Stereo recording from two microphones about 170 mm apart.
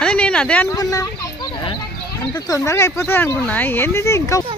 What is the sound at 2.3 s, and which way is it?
Speech, 20° left (ahead or behind).